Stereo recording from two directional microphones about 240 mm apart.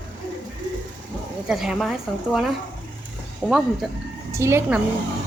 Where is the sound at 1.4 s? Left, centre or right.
Centre.